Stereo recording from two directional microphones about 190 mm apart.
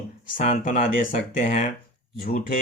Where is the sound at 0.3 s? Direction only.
45° left (ahead or behind).